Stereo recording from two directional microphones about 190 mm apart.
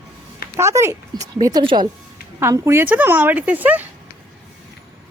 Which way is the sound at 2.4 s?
15° right (ahead or behind).